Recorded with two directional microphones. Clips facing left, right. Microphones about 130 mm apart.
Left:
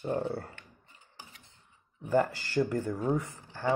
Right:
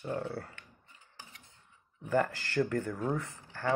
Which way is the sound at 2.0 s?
10° left (ahead or behind).